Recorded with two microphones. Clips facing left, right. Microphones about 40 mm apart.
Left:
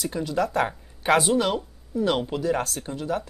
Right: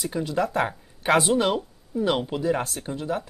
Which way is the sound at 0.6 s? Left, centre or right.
Centre.